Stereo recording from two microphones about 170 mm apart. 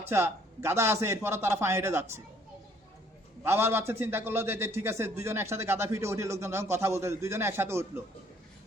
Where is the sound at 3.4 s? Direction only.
15° right (ahead or behind).